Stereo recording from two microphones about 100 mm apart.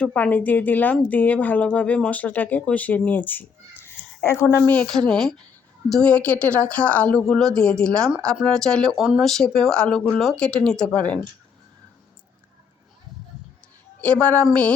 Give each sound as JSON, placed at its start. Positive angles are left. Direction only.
{"t": 0.0, "sound": "speech", "side_deg": 15}
{"t": 3.8, "sound": "a sound", "side_deg": 25}
{"t": 4.5, "sound": "speech", "side_deg": 20}
{"t": 4.8, "sound": "speech", "side_deg": 5}
{"t": 14.0, "sound": "speech", "side_deg": 15}